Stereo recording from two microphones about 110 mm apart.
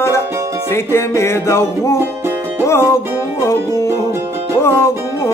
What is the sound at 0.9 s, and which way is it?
Music, 25° left (ahead or behind).